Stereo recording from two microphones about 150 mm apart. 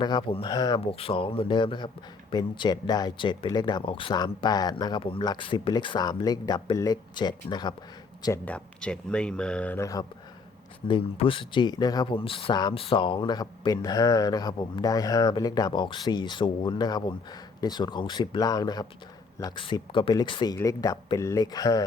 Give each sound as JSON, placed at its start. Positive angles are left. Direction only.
{"t": 0.0, "sound": "speech", "side_deg": 30}
{"t": 8.4, "sound": "speech", "side_deg": 5}
{"t": 9.8, "sound": "speech", "side_deg": 25}
{"t": 10.8, "sound": "speech", "side_deg": 35}